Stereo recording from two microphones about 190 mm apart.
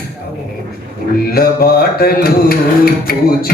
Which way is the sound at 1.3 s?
55° left (ahead or behind).